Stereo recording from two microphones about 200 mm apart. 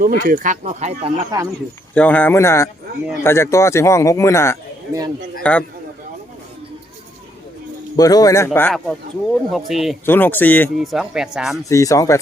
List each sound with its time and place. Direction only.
0.0 s speech: 45° right (ahead or behind)
1.3 s speech: 15° right (ahead or behind)
2.0 s a man's voice: 10° left (ahead or behind)
7.9 s speech: 20° left (ahead or behind)
8.5 s speech: 5° left (ahead or behind)
10.1 s speech: 10° left (ahead or behind)
10.8 s speech: centre (ahead or behind)
11.7 s speech: 15° left (ahead or behind)